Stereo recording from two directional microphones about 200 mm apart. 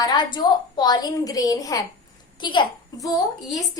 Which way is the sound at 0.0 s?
20° left (ahead or behind).